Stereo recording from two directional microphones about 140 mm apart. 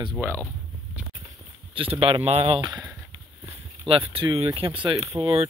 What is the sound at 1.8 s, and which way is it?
Speech, 40° right (ahead or behind).